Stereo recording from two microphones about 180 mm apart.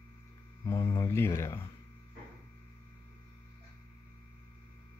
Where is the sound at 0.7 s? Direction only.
15° left (ahead or behind).